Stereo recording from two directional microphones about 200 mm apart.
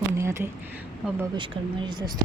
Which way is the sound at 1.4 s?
25° right (ahead or behind).